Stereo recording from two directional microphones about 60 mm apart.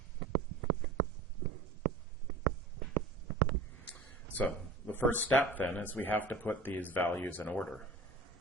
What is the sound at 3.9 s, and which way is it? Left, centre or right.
Speech, left.